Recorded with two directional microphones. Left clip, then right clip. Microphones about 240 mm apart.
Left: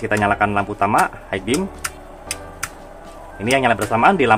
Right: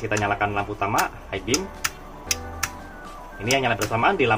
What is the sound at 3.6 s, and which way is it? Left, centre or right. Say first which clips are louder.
Speech: left 8 dB; left.